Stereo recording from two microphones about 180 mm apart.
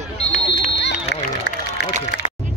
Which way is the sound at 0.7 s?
70° left (ahead or behind).